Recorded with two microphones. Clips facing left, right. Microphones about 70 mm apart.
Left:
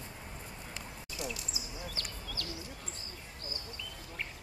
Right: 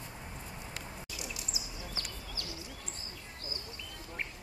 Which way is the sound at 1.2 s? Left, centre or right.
Right.